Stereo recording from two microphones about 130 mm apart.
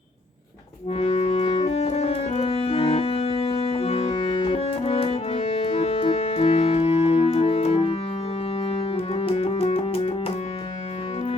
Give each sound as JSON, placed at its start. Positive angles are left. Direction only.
{"t": 0.9, "sound": "music", "side_deg": 55}